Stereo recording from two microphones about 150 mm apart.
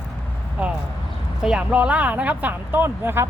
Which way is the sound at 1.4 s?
5° right (ahead or behind).